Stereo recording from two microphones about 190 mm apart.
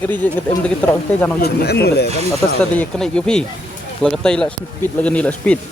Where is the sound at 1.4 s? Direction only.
55° left (ahead or behind).